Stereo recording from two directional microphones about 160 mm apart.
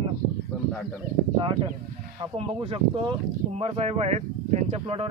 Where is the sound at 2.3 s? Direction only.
35° right (ahead or behind).